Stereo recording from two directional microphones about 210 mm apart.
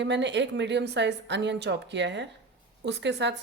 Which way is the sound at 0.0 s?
55° right (ahead or behind).